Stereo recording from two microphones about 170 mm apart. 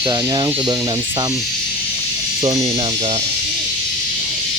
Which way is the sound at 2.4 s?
20° right (ahead or behind).